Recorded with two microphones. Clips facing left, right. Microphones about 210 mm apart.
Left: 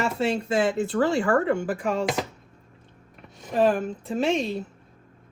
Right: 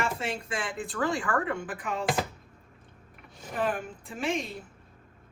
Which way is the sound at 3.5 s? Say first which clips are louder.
Left 9 dB; 30° left (ahead or behind).